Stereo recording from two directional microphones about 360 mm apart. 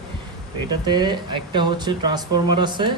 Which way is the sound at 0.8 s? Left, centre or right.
Centre.